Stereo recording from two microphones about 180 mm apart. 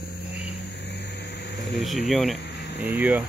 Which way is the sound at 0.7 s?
70° left (ahead or behind).